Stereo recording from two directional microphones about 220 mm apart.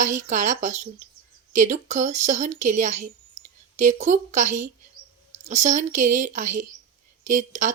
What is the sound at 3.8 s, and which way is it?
Speech, 35° right (ahead or behind).